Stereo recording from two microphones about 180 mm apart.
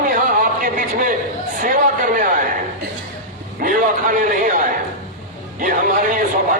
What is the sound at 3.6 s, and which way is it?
A man's voice, 50° right (ahead or behind).